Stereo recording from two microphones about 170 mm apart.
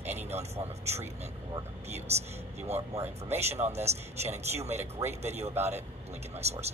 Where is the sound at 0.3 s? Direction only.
40° right (ahead or behind).